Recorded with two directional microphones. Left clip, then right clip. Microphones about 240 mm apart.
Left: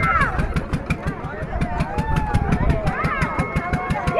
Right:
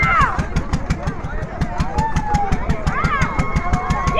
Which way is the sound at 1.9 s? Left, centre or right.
Centre.